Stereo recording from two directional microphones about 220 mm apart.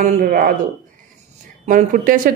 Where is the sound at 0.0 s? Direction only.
40° right (ahead or behind).